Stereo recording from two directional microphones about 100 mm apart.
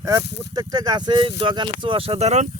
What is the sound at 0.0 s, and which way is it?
Speech, 35° right (ahead or behind).